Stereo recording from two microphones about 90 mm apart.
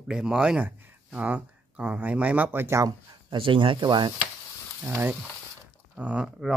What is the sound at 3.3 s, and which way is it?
Speech, 70° right (ahead or behind).